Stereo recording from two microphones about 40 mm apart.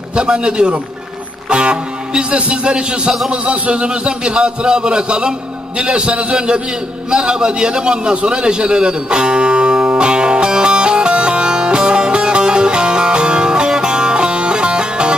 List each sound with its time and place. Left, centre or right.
0.1 s a man's voice: right
7.1 s a sound: right
13.7 s music: centre